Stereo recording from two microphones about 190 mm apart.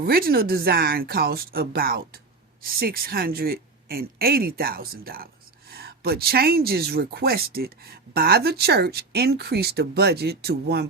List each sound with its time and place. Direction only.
0.0 s speech: 50° right (ahead or behind)